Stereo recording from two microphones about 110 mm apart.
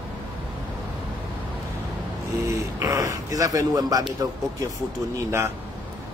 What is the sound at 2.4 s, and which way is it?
Speech, 30° right (ahead or behind).